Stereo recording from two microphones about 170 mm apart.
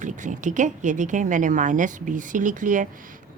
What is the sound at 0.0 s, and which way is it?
A woman's voice, 45° right (ahead or behind).